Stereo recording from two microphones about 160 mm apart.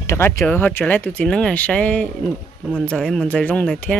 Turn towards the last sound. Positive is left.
turn(degrees=10)  # may be behind; listen again after turning